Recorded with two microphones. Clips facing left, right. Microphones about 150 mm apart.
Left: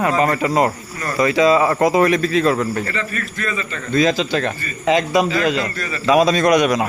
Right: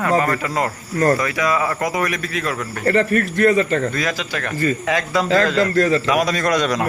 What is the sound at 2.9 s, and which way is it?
Speech, 60° right (ahead or behind).